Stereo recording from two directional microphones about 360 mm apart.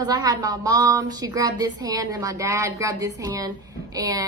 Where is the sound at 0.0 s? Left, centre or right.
Centre.